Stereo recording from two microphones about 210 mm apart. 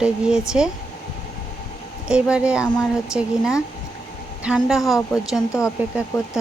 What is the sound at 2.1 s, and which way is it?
Speech, 5° right (ahead or behind).